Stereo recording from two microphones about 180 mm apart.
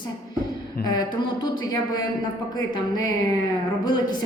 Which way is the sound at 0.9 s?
25° left (ahead or behind).